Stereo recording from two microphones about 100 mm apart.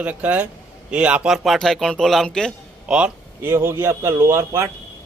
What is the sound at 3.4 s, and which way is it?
Speech, 25° right (ahead or behind).